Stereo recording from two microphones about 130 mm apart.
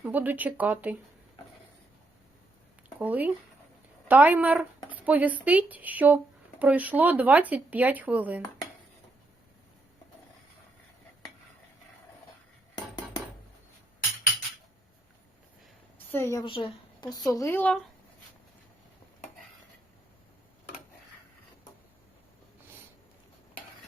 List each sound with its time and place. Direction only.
0.0 s speech: 15° right (ahead or behind)
3.0 s speech: 10° right (ahead or behind)
16.1 s a woman's voice: 20° left (ahead or behind)
16.4 s speech: 40° left (ahead or behind)
17.6 s speech: 10° left (ahead or behind)